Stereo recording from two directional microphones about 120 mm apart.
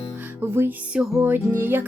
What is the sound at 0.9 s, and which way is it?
Music, 5° right (ahead or behind).